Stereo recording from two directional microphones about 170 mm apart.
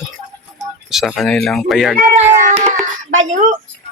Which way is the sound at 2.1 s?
45° right (ahead or behind).